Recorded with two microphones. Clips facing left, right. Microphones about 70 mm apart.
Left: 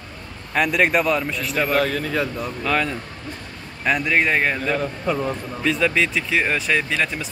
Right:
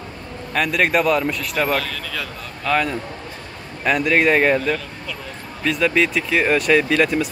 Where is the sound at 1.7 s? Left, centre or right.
Left.